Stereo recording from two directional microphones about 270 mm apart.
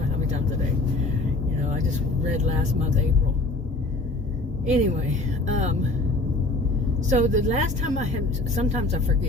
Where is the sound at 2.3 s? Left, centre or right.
Right.